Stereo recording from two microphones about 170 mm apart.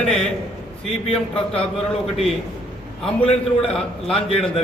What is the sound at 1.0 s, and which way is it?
Speech, 35° left (ahead or behind).